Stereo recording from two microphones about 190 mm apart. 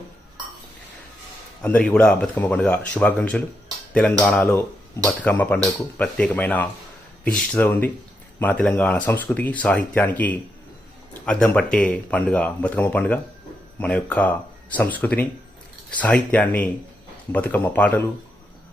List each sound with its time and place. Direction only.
1.6 s speech: 10° left (ahead or behind)